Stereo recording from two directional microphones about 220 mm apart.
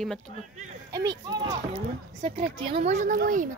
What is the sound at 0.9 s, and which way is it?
Speech, 15° right (ahead or behind).